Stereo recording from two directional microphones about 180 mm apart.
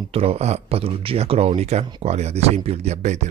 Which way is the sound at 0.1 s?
35° right (ahead or behind).